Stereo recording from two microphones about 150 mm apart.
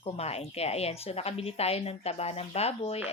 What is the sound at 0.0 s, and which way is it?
Speech, 45° left (ahead or behind).